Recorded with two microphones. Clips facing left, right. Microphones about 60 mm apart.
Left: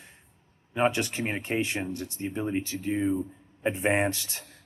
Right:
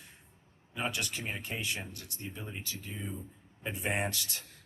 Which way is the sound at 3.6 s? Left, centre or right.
Left.